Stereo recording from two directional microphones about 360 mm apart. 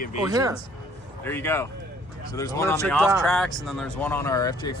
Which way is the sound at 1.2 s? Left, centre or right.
Centre.